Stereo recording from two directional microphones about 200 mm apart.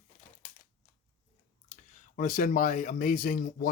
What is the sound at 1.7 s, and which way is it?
Speech, 40° left (ahead or behind).